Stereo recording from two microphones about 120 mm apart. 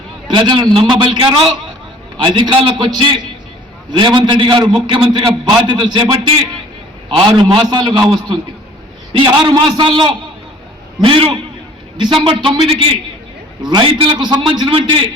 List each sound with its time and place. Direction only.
0.3 s a man's voice: 40° right (ahead or behind)
9.1 s a man's voice: 40° right (ahead or behind)